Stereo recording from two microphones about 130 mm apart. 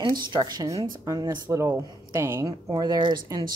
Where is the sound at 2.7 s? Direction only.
35° right (ahead or behind).